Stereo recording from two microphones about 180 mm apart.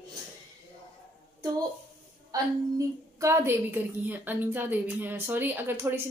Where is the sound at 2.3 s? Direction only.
20° right (ahead or behind).